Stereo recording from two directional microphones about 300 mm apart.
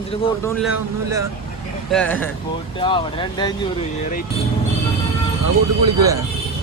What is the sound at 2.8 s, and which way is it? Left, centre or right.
Speech, centre.